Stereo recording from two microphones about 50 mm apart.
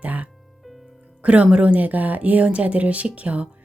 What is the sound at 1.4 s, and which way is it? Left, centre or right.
Speech, right.